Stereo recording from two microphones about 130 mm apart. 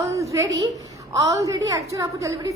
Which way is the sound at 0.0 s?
25° right (ahead or behind).